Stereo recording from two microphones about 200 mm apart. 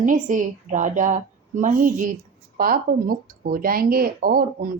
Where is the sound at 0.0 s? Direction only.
40° right (ahead or behind).